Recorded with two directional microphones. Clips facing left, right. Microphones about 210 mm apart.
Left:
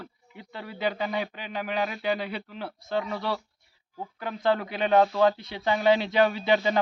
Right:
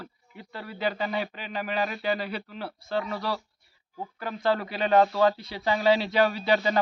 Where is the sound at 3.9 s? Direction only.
Centre (ahead or behind).